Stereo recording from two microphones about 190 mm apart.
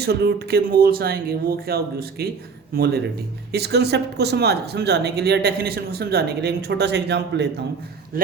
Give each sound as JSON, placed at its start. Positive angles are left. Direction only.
{"t": 0.0, "sound": "speech", "side_deg": -60}